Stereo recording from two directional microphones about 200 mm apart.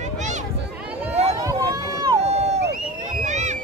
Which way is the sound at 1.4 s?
15° right (ahead or behind).